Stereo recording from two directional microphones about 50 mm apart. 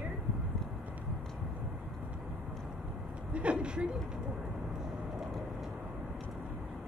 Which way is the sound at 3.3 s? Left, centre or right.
Right.